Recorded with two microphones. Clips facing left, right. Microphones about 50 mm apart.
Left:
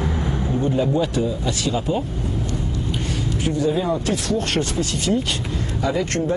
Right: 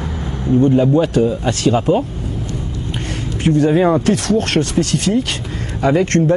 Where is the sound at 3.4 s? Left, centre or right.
Right.